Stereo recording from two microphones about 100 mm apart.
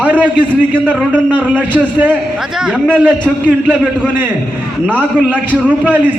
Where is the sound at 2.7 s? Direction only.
5° left (ahead or behind).